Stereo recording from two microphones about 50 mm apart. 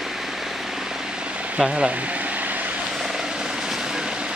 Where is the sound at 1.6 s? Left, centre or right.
Centre.